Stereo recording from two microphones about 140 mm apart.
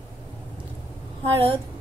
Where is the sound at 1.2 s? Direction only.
40° right (ahead or behind).